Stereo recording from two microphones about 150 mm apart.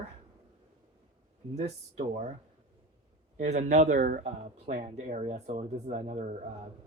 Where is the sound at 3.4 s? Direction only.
55° right (ahead or behind).